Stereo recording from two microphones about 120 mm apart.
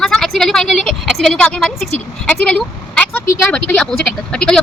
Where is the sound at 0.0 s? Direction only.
5° left (ahead or behind).